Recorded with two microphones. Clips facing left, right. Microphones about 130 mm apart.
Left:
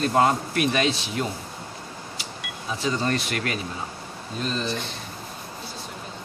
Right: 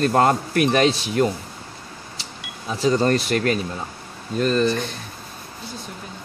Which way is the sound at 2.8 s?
40° right (ahead or behind).